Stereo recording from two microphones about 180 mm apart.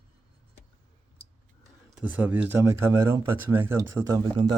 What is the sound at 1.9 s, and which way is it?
Speech, 10° right (ahead or behind).